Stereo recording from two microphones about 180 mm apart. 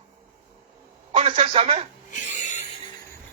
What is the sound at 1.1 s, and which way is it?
Speech, 35° right (ahead or behind).